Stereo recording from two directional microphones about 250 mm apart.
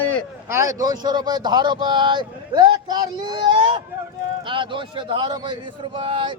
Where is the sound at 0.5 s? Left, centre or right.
Centre.